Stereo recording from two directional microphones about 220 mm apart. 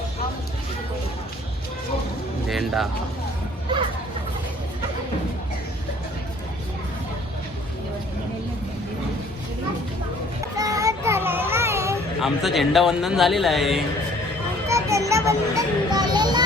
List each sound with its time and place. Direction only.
2.5 s speech: centre (ahead or behind)
10.6 s child singing: 15° right (ahead or behind)
12.2 s a man's voice: centre (ahead or behind)
14.7 s music: 15° right (ahead or behind)